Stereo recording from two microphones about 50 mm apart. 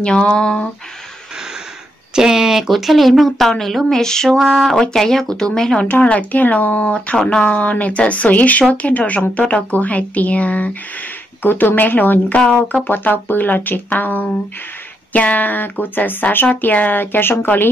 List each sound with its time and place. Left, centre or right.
0.0 s speech: left
2.1 s speech: centre
4.4 s speech: centre
4.7 s speech: centre
5.8 s speech: left
11.4 s speech: left